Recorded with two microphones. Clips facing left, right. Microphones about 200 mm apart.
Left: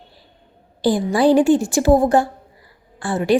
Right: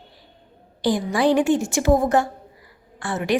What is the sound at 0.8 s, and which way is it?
A woman's voice, 30° left (ahead or behind).